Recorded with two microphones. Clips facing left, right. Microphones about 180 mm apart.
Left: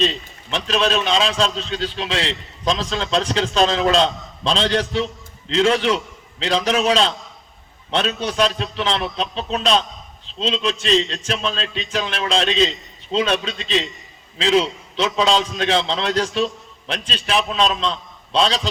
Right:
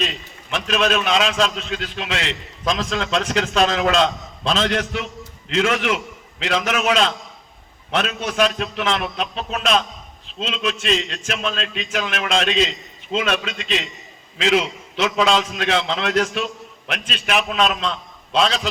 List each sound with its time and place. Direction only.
0.0 s a man's voice: 30° left (ahead or behind)